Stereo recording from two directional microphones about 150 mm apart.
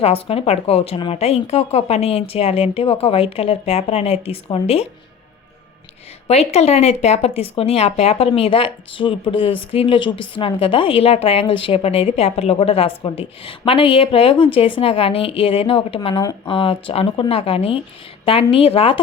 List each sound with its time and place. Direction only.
0.0 s speech: 40° left (ahead or behind)
6.2 s speech: 45° left (ahead or behind)